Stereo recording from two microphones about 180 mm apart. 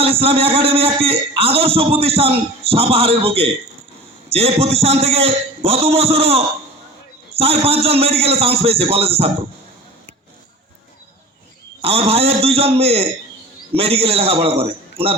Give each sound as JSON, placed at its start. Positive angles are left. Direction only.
{"t": 0.0, "sound": "a man's voice", "side_deg": -30}
{"t": 11.8, "sound": "a man's voice", "side_deg": -35}